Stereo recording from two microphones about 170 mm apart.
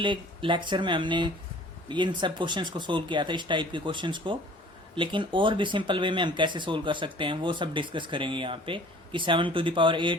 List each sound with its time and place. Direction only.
0.0 s speech: 30° right (ahead or behind)